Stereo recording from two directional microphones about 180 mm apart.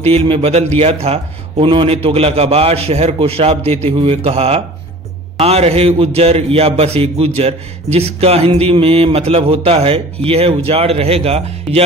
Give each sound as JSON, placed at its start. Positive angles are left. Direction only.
{"t": 0.0, "sound": "a man's voice", "side_deg": -35}